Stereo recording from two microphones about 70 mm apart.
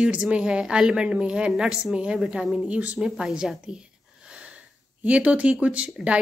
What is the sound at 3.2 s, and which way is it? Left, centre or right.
Speech, centre.